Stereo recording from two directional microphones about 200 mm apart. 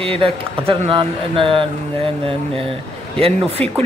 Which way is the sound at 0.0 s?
30° right (ahead or behind).